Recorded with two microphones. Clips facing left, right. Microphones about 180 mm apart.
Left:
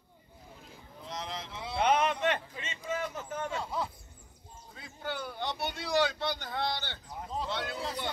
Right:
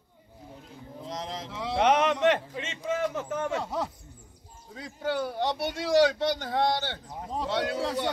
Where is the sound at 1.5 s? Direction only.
85° right.